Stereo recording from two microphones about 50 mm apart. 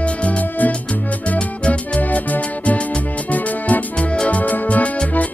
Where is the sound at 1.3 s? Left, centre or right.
Centre.